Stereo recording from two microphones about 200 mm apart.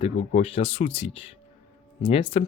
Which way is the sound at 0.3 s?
30° left (ahead or behind).